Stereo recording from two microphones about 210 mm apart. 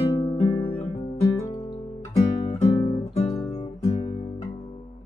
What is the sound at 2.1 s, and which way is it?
Music, 25° left (ahead or behind).